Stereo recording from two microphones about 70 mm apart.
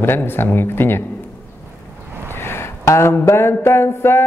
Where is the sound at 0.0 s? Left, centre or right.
Left.